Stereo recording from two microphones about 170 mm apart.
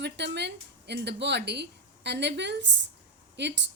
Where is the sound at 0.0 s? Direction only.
90° right.